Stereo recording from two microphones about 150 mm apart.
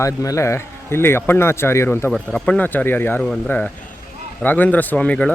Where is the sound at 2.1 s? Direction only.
5° left (ahead or behind).